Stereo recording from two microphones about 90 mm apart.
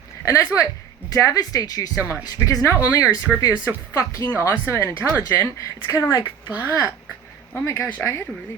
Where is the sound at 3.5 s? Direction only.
10° right (ahead or behind).